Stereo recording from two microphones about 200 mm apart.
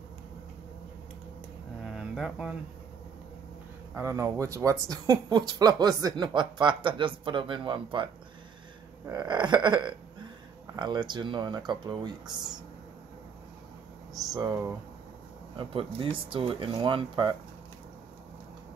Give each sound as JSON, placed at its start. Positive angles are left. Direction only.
{"t": 1.9, "sound": "mantra", "side_deg": -5}
{"t": 3.9, "sound": "speech", "side_deg": -15}
{"t": 14.1, "sound": "speech", "side_deg": -20}